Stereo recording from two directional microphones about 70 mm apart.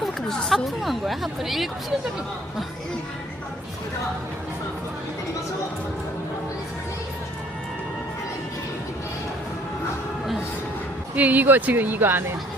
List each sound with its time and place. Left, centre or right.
0.0 s speech: centre
11.1 s speech: right